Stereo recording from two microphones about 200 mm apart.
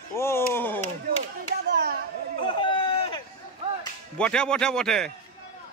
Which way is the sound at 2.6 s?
25° left (ahead or behind).